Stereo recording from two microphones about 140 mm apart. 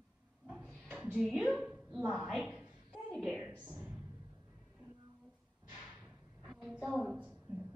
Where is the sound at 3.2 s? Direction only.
15° right (ahead or behind).